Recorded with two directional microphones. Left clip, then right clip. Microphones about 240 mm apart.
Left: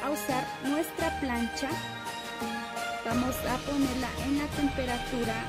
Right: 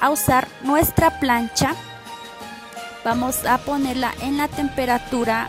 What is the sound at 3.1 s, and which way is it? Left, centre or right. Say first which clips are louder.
Speech: right 12 dB; right.